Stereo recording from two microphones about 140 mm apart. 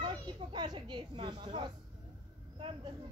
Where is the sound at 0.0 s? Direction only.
35° right (ahead or behind).